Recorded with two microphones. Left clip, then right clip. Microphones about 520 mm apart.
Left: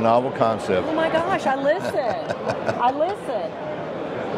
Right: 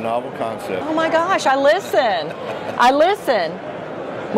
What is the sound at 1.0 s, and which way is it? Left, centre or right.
A man's voice, right.